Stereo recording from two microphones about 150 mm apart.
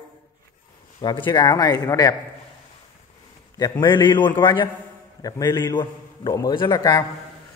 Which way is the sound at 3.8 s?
30° left (ahead or behind).